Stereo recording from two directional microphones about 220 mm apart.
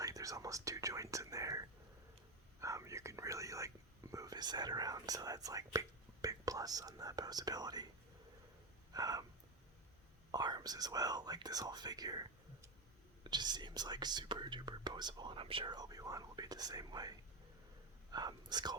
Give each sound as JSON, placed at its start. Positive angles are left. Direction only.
{"t": 0.0, "sound": "speech", "side_deg": -15}
{"t": 8.9, "sound": "a sound", "side_deg": -15}
{"t": 10.3, "sound": "speech", "side_deg": -20}